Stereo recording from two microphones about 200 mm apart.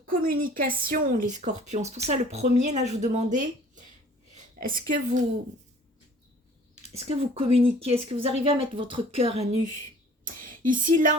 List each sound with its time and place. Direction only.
0.1 s speech: 45° right (ahead or behind)
6.9 s speech: 30° right (ahead or behind)
10.2 s speech: 45° right (ahead or behind)